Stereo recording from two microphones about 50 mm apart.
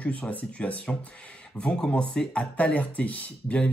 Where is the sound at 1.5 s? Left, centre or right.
Centre.